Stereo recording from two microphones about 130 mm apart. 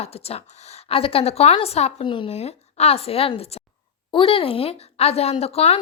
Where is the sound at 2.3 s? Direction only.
55° left (ahead or behind).